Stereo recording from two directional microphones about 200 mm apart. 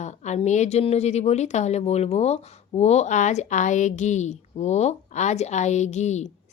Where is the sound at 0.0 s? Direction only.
35° left (ahead or behind).